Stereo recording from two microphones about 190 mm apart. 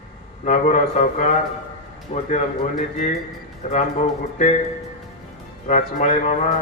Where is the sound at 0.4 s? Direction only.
40° left (ahead or behind).